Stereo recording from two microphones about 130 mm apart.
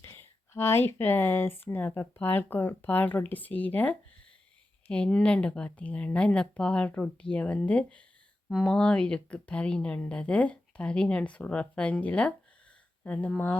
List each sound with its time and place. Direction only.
0.0 s speech: 20° left (ahead or behind)